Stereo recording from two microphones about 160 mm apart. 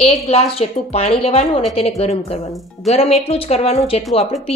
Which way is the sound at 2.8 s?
40° left (ahead or behind).